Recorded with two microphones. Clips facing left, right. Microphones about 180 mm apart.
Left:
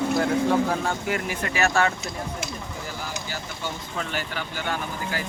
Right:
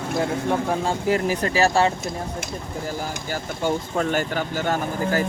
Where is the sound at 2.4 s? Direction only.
45° right (ahead or behind).